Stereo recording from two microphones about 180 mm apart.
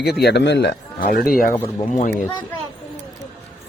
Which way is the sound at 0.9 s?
55° left (ahead or behind).